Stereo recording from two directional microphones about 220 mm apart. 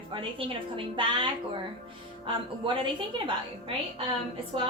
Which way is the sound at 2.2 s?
25° right (ahead or behind).